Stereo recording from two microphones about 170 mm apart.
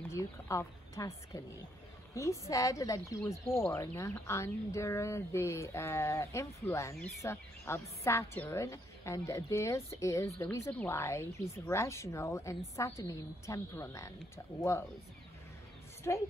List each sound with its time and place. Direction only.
0.1 s speech: 15° left (ahead or behind)
16.1 s a woman's voice: 20° left (ahead or behind)